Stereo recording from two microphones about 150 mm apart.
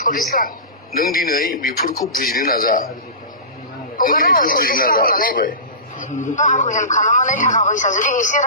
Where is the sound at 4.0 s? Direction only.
65° left (ahead or behind).